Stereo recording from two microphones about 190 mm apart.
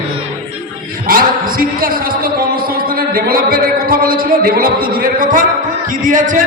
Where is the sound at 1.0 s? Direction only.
50° right (ahead or behind).